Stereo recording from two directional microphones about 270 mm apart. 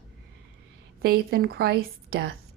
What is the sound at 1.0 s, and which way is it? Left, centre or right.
Speech, right.